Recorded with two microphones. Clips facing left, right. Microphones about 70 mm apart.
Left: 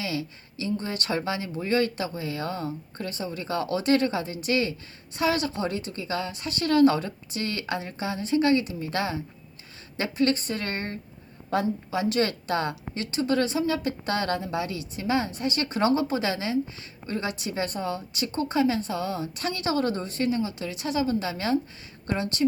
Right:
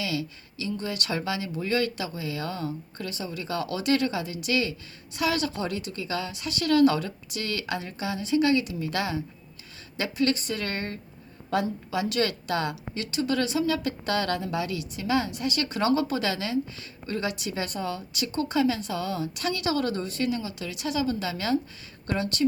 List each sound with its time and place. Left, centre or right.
0.0 s a woman's voice: left